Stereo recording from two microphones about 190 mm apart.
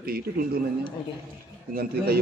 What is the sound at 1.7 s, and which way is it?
Speech, 55° right (ahead or behind).